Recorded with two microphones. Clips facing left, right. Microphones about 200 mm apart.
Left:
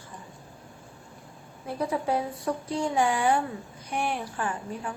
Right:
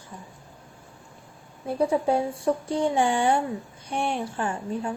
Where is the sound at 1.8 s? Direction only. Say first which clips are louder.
Right 5 dB; 30° right (ahead or behind).